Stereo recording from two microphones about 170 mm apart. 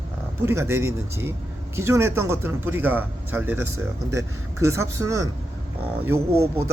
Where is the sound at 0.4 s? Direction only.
15° right (ahead or behind).